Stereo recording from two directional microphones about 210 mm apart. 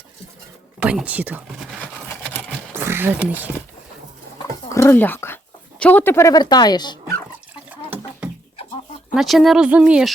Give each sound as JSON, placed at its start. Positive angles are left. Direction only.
{"t": 0.8, "sound": "speech", "side_deg": -5}
{"t": 2.0, "sound": "a sound", "side_deg": 10}
{"t": 2.7, "sound": "a sound", "side_deg": -10}
{"t": 4.4, "sound": "roaring cats", "side_deg": 15}
{"t": 5.8, "sound": "speech", "side_deg": 10}
{"t": 9.1, "sound": "speech", "side_deg": 0}